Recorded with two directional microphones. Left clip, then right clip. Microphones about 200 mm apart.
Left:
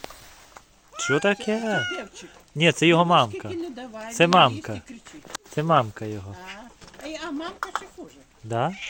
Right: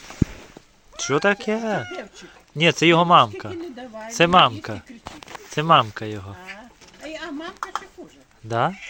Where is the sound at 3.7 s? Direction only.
50° right (ahead or behind).